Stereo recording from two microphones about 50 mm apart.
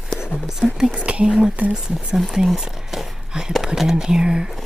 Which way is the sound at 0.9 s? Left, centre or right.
Right.